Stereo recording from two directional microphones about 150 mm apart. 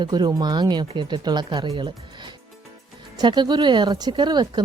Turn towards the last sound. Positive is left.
turn(degrees=-30)  # may be behind; listen again after turning